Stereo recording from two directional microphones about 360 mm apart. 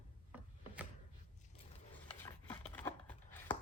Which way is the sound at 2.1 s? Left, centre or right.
Centre.